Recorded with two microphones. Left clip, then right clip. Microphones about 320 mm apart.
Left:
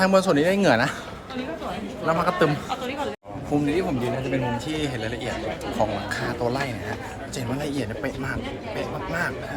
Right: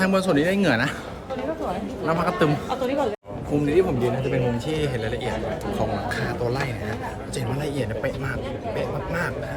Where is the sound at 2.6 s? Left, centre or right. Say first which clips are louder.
Right 4 dB; right.